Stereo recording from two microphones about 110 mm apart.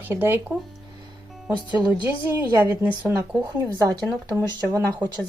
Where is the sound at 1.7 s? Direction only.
40° right (ahead or behind).